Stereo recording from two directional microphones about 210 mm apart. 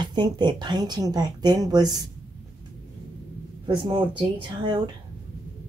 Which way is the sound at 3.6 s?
20° right (ahead or behind).